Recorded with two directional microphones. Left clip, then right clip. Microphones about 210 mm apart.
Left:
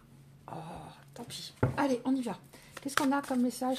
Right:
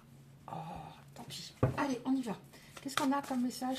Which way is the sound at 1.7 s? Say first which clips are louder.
Left 8 dB; 45° left (ahead or behind).